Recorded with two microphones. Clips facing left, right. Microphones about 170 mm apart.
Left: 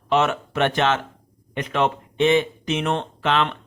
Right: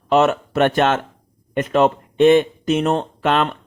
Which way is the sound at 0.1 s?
40° right (ahead or behind).